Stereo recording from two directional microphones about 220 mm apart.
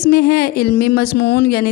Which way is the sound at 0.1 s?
45° left (ahead or behind).